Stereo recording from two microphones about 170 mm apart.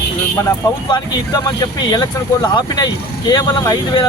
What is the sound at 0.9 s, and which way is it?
Speech, 25° left (ahead or behind).